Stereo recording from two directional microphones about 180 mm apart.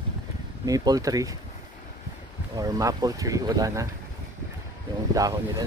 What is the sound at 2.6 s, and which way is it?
Speech, 20° right (ahead or behind).